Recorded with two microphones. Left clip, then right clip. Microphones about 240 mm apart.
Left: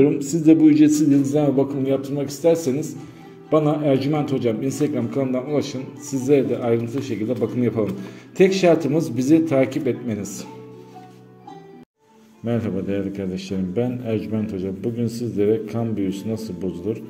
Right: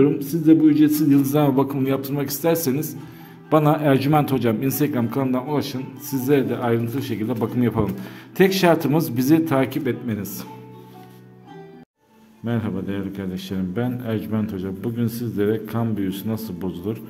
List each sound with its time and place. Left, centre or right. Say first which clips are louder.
0.0 s a man's voice: left 1 dB; centre
12.4 s a man's voice: left 3 dB; centre